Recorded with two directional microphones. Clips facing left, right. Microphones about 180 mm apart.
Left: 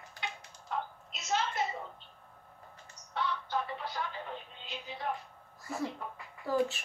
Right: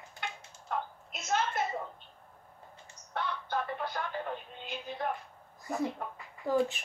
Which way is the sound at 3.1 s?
55° right (ahead or behind).